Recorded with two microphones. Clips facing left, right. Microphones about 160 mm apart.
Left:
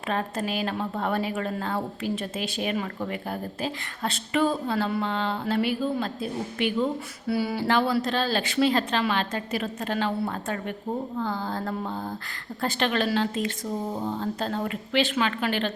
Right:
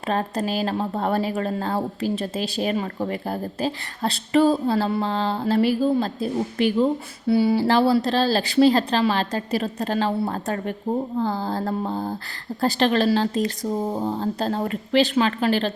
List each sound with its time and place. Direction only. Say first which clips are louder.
0.1 s speech: right 4 dB; 35° right (ahead or behind)